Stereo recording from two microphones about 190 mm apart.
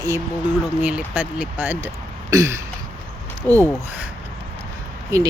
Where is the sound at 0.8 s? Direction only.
5° right (ahead or behind).